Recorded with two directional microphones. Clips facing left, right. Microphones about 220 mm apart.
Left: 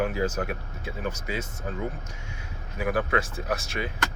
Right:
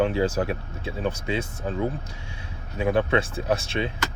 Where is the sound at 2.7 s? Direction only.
25° right (ahead or behind).